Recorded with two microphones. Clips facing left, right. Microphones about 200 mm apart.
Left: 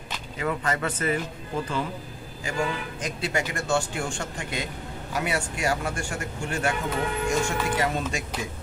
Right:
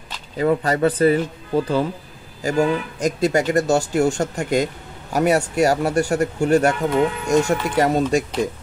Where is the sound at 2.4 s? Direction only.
40° right (ahead or behind).